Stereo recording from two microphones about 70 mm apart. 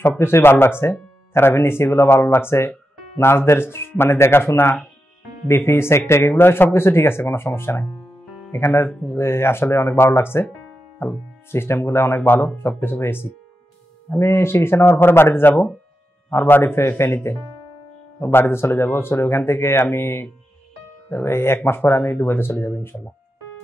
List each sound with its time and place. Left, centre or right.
0.2 s speech: left